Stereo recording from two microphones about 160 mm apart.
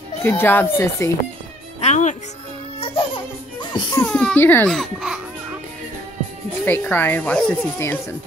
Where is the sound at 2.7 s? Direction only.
35° left (ahead or behind).